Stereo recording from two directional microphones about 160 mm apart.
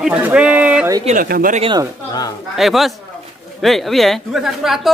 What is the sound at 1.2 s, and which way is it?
Speech, 60° right (ahead or behind).